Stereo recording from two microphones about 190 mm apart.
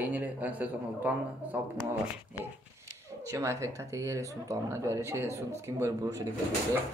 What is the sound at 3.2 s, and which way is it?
Speech, 15° right (ahead or behind).